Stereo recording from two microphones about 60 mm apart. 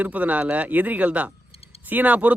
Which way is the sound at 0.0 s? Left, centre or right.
Right.